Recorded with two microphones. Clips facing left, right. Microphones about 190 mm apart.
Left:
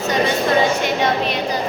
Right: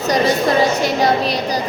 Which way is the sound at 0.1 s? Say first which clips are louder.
Right 2 dB; 35° right (ahead or behind).